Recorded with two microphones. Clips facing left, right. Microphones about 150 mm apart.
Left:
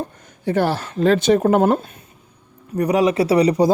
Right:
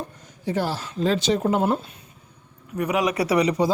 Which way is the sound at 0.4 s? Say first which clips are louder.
Left 6 dB; 60° left (ahead or behind).